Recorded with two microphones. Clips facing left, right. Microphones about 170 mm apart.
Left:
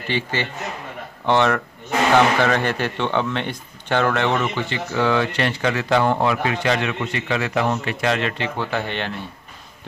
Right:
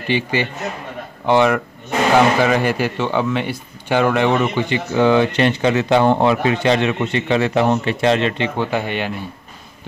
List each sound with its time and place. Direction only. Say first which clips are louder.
0.1 s a man's voice: right 5 dB; 15° right (ahead or behind)